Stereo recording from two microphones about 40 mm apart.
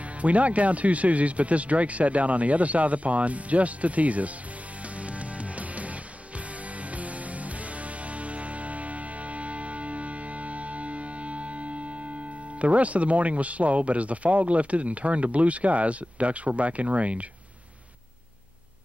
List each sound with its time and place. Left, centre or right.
0.2 s speech: right
4.9 s music: right
12.5 s speech: right